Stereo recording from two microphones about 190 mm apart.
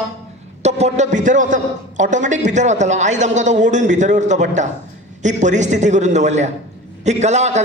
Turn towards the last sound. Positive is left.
turn(degrees=-35)  # may be behind; listen again after turning